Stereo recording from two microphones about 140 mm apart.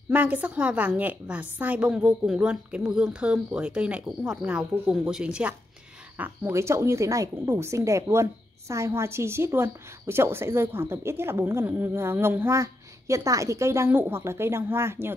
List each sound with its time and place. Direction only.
0.1 s a woman's voice: 10° right (ahead or behind)